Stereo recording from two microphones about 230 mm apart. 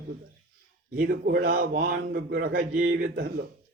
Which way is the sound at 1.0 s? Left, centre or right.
Right.